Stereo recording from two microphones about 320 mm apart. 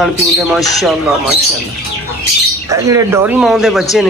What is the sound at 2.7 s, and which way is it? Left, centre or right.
Speech, centre.